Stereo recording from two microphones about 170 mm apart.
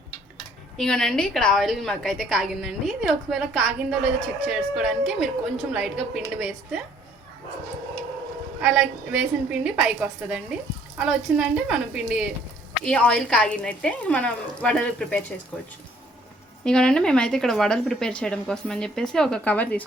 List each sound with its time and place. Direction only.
0.8 s a woman's voice: 5° left (ahead or behind)
8.6 s a woman's voice: 5° right (ahead or behind)
12.8 s speech: 5° left (ahead or behind)
16.6 s a woman's voice: 5° left (ahead or behind)